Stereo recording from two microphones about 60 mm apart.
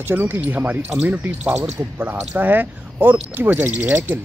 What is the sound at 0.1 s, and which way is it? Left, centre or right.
Speech, right.